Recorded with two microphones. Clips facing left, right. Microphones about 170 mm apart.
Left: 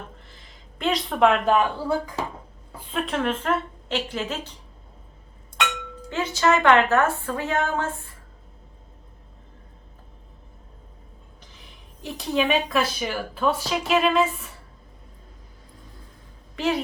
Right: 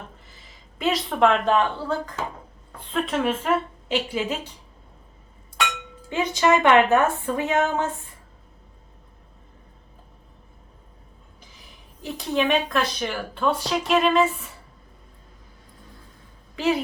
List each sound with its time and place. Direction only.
0.8 s a woman's voice: 5° right (ahead or behind)
6.1 s a woman's voice: 15° right (ahead or behind)
12.0 s speech: centre (ahead or behind)
16.6 s speech: centre (ahead or behind)